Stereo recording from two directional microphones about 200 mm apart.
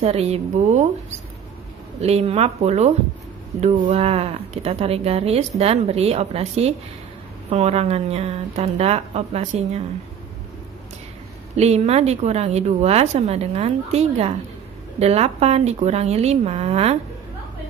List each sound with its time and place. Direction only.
0.0 s speech: 30° right (ahead or behind)
2.0 s speech: 30° right (ahead or behind)
11.5 s speech: 30° right (ahead or behind)